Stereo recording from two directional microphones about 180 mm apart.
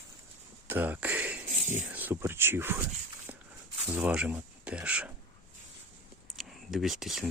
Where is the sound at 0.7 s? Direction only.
10° right (ahead or behind).